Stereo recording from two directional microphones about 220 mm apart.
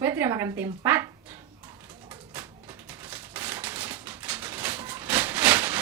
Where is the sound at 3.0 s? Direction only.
5° right (ahead or behind).